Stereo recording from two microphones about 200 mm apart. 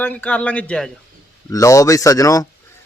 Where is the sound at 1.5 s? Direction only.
15° left (ahead or behind).